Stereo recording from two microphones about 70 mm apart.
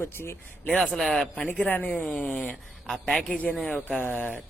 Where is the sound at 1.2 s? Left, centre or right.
Centre.